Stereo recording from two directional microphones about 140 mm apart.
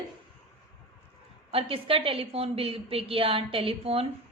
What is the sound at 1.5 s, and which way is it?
A woman's voice, 45° right (ahead or behind).